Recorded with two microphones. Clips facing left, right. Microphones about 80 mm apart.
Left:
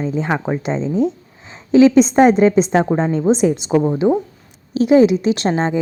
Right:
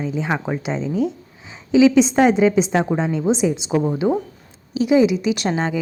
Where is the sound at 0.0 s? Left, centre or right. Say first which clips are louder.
Left 3 dB; left.